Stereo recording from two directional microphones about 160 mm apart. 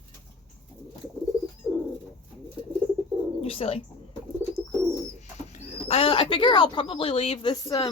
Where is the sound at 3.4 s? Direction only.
35° left (ahead or behind).